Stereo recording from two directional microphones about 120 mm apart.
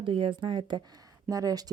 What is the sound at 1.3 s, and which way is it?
Speech, 30° right (ahead or behind).